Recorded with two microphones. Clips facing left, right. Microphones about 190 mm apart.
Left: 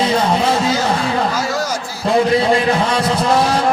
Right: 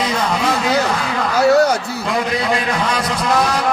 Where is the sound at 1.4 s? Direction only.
65° right (ahead or behind).